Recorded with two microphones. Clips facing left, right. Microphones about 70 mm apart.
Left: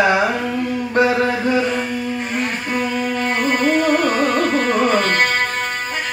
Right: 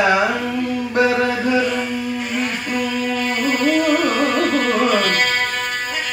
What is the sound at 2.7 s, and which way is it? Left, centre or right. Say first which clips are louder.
Music: left 1 dB; left.